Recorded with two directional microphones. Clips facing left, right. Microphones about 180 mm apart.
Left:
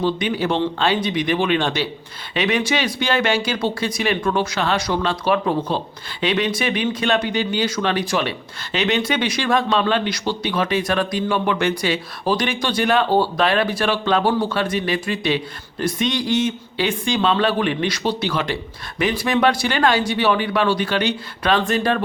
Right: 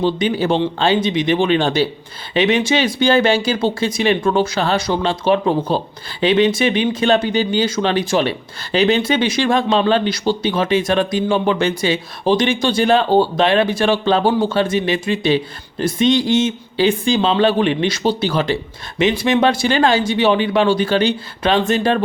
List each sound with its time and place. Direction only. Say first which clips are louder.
0.0 s speech: right 3 dB; 30° right (ahead or behind)